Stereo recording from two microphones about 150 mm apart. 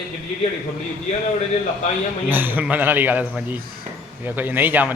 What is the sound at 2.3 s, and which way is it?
A man's voice, 15° right (ahead or behind).